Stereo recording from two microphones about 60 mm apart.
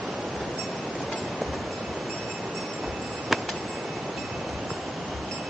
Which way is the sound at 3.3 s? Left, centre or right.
Centre.